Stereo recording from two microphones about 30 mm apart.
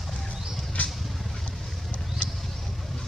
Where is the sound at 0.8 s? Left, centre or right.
Left.